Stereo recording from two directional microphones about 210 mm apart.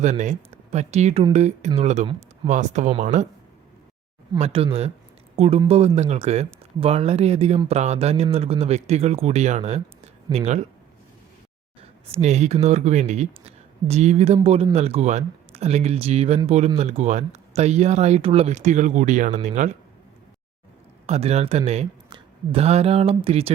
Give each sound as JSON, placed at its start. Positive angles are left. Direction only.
{"t": 0.0, "sound": "speech", "side_deg": -35}
{"t": 4.3, "sound": "speech", "side_deg": -30}
{"t": 11.8, "sound": "speech", "side_deg": -30}
{"t": 21.1, "sound": "speech", "side_deg": -30}